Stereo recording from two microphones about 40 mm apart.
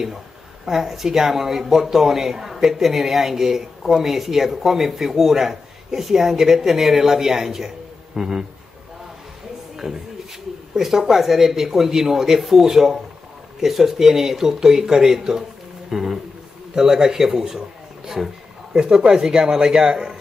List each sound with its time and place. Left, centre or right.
0.7 s speech: centre
9.8 s speech: centre
18.7 s a man's voice: centre